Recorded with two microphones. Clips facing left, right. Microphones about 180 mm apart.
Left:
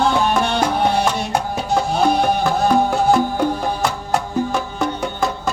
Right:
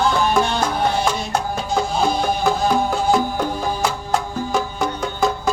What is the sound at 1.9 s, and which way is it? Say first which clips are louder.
Music: left 4 dB; 65° left (ahead or behind).